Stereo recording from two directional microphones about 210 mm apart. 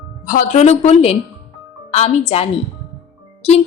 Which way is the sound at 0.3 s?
35° left (ahead or behind).